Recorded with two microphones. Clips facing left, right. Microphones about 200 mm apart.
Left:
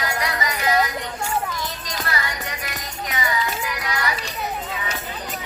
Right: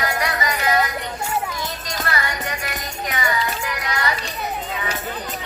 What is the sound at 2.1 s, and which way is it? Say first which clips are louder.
Music: right 3 dB; 60° right (ahead or behind).